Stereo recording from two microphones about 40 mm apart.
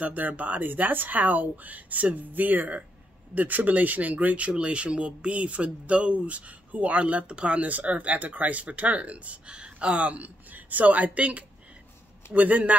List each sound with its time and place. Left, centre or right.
0.0 s speech: right
9.5 s speech: right